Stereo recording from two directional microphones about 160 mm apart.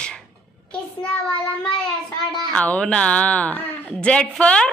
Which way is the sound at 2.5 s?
10° left (ahead or behind).